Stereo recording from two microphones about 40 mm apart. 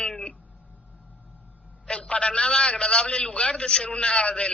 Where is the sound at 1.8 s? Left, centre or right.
Left.